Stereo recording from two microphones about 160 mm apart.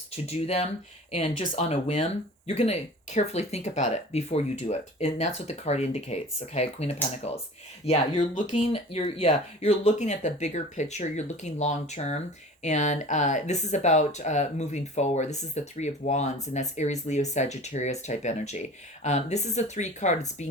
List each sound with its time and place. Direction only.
0.1 s speech: 40° left (ahead or behind)